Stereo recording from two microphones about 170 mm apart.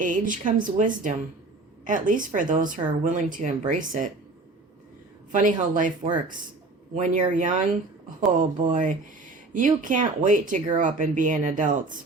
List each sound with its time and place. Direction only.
0.0 s speech: 50° right (ahead or behind)
5.3 s speech: 50° right (ahead or behind)